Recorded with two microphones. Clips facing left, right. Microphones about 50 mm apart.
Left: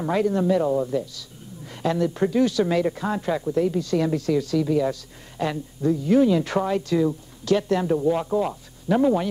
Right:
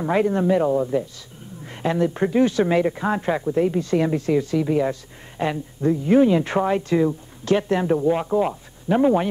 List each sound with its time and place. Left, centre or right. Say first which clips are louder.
0.1 s speech: right 2 dB; right